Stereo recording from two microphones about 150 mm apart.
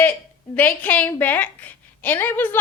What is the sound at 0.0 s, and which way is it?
A woman's voice, 10° left (ahead or behind).